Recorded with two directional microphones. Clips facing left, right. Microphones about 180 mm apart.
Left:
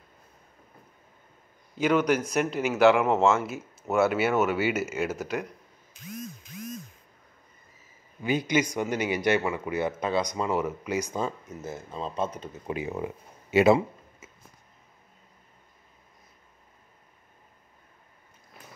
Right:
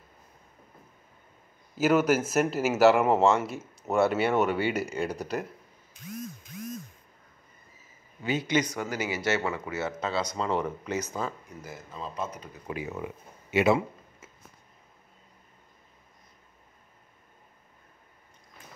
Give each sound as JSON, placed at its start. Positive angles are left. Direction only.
{"t": 1.8, "sound": "speech", "side_deg": -5}
{"t": 8.2, "sound": "speech", "side_deg": 15}